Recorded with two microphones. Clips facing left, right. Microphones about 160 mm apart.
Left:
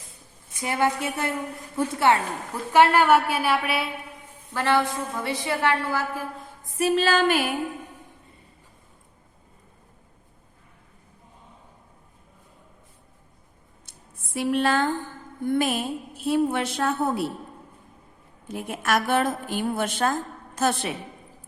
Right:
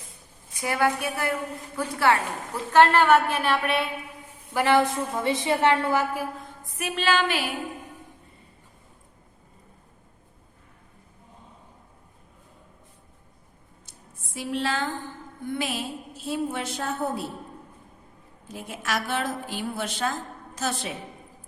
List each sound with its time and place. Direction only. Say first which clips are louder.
0.6 s a woman's voice: even; 20° left (ahead or behind)
2.7 s a woman's voice: even; 10° left (ahead or behind)
4.5 s a woman's voice: right 2 dB; 15° right (ahead or behind)
6.7 s music: left 4 dB; 35° left (ahead or behind)
14.3 s a woman's voice: left 5 dB; 55° left (ahead or behind)
18.4 s a woman's voice: left 5 dB; 60° left (ahead or behind)